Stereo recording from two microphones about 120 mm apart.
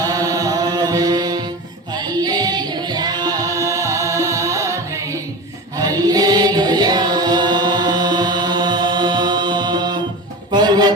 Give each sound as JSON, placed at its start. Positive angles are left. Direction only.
{"t": 0.0, "sound": "chant", "side_deg": -30}
{"t": 1.9, "sound": "singing", "side_deg": -35}
{"t": 5.7, "sound": "chant", "side_deg": -30}
{"t": 10.5, "sound": "music", "side_deg": -35}